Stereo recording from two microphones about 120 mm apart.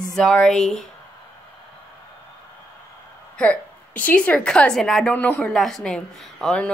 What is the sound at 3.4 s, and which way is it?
A woman's voice, 10° left (ahead or behind).